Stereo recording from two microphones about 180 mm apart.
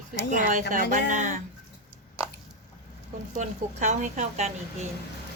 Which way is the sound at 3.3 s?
40° right (ahead or behind).